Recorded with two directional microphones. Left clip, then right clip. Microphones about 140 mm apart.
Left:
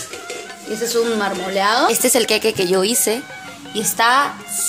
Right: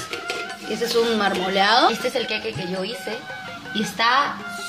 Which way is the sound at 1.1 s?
25° left (ahead or behind).